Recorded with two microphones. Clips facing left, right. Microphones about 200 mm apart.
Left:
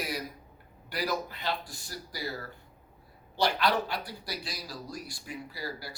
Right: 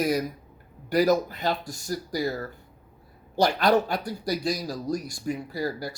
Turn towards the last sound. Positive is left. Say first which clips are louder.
# right 9 dB
turn(degrees=-45)  # may be behind; listen again after turning